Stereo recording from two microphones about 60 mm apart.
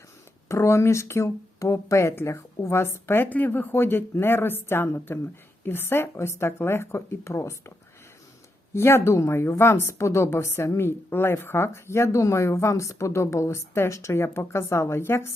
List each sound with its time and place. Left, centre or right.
0.4 s a woman's voice: left
3.2 s a woman's voice: left
8.7 s a woman's voice: left